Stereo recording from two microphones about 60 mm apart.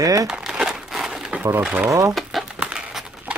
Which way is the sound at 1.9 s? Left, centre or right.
Right.